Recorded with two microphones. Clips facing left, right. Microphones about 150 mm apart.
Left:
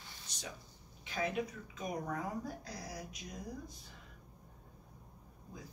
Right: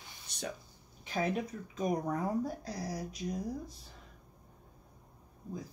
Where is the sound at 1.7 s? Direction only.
40° right (ahead or behind).